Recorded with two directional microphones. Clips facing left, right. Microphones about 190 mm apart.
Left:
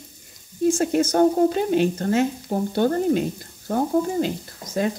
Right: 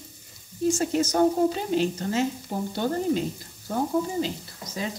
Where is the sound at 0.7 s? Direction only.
55° left (ahead or behind).